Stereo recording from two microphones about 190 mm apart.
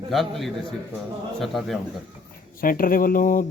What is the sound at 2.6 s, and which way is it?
Speech, 45° left (ahead or behind).